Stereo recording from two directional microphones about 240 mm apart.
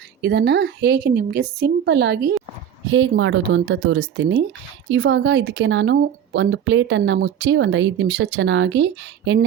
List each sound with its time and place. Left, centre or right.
0.2 s speech: right